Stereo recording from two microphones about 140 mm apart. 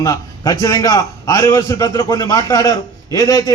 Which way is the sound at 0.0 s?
25° left (ahead or behind).